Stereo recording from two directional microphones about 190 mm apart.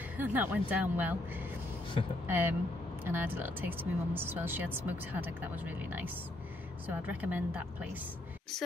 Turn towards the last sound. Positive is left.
turn(degrees=-10)  # may be behind; listen again after turning